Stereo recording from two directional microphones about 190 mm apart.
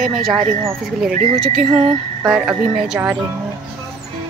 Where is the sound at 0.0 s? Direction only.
Centre (ahead or behind).